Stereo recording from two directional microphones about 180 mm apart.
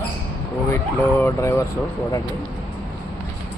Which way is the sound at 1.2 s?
15° left (ahead or behind).